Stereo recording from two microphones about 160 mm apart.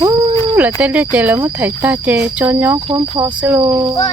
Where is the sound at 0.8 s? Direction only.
10° right (ahead or behind).